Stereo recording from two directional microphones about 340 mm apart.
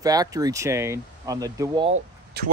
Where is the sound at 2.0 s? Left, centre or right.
Right.